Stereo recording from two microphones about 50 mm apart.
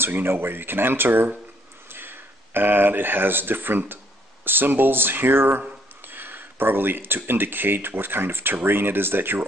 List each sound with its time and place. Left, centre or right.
0.0 s speech: right